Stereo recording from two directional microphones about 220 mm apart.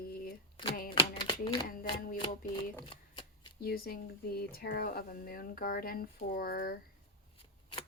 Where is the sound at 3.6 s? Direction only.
45° left (ahead or behind).